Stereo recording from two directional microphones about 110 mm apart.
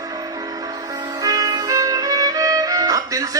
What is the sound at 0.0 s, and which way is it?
Music, 35° right (ahead or behind).